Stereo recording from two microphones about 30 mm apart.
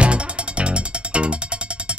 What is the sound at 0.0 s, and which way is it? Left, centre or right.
Music, right.